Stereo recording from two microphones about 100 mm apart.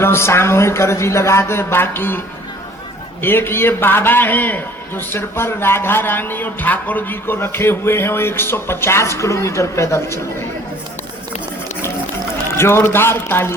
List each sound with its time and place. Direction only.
0.0 s a man's voice: 25° left (ahead or behind)
12.5 s a man's voice: 25° left (ahead or behind)